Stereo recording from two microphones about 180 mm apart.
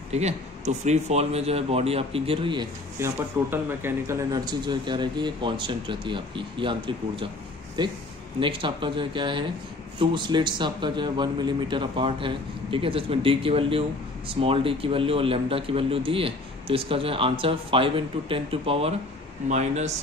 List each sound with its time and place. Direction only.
0.1 s a man's voice: 40° right (ahead or behind)
3.0 s a man's voice: 15° right (ahead or behind); by 19.9 s 40° right (ahead or behind)